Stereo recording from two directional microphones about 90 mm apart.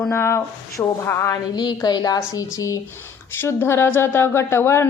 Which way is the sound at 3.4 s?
30° left (ahead or behind).